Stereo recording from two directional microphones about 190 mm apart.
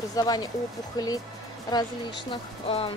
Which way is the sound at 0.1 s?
20° left (ahead or behind).